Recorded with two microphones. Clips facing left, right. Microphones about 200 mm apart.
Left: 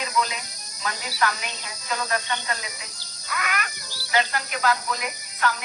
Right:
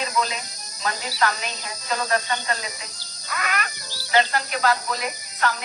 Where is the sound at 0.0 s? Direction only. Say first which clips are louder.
Right 1 dB; 35° right (ahead or behind).